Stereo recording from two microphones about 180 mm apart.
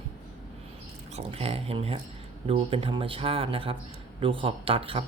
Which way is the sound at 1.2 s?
35° right (ahead or behind).